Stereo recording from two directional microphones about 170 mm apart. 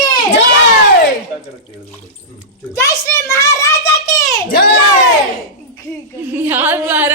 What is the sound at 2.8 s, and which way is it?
A child's voice, 15° left (ahead or behind).